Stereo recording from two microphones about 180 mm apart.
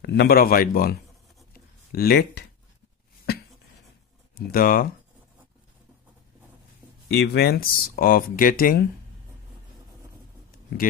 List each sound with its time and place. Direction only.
0.0 s speech: 65° left (ahead or behind)
1.5 s a sound: 55° left (ahead or behind)
4.4 s speech: 55° left (ahead or behind)
7.1 s speech: 65° left (ahead or behind)